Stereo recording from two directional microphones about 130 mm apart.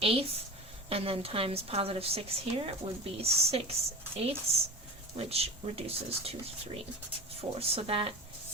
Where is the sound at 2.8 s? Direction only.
65° right (ahead or behind).